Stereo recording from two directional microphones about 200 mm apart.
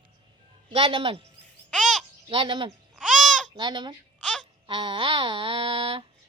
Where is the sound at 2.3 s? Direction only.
25° right (ahead or behind).